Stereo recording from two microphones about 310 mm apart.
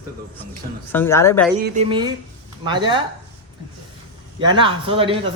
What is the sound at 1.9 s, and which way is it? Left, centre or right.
A man's voice, centre.